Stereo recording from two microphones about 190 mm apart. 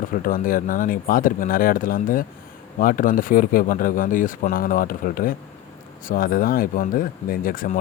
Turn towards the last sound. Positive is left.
turn(degrees=45)  # may be behind; listen again after turning